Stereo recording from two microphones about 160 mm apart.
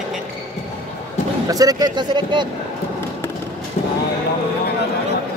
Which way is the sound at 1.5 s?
25° right (ahead or behind).